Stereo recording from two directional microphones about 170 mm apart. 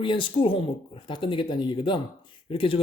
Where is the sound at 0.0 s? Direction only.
30° left (ahead or behind).